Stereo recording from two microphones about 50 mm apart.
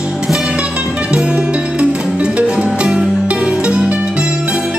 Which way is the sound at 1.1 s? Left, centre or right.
Centre.